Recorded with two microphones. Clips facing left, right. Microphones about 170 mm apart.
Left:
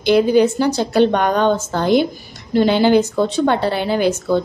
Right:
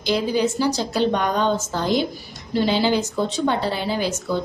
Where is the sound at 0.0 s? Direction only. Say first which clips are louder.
Left 8 dB; 60° left (ahead or behind).